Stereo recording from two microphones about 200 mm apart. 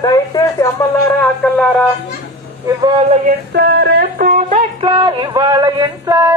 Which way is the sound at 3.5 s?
55° right (ahead or behind).